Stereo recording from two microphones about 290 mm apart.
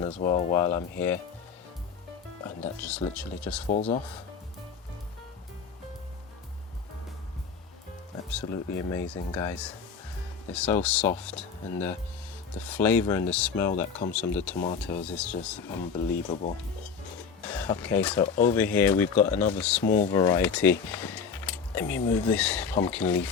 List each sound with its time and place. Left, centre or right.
0.0 s speech: centre
2.8 s speech: centre
3.7 s speech: left
8.3 s speech: centre
14.5 s speech: left
14.8 s speech: centre
17.4 s speech: centre
19.8 s speech: left
20.1 s speech: centre